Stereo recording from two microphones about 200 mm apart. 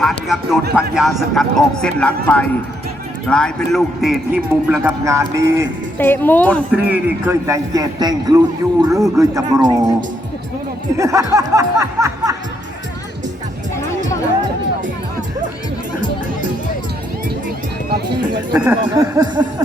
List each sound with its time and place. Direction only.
0.0 s speech: centre (ahead or behind)
4.8 s a man's voice: 15° right (ahead or behind)
6.0 s speech: 10° left (ahead or behind)
6.7 s a man's voice: 10° right (ahead or behind)
10.9 s a man's voice: 15° right (ahead or behind)
18.5 s speech: 15° right (ahead or behind)